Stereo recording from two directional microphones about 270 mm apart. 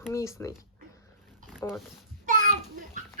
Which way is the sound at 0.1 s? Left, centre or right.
Centre.